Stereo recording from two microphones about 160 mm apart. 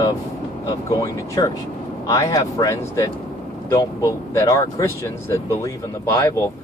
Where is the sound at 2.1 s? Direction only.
25° left (ahead or behind).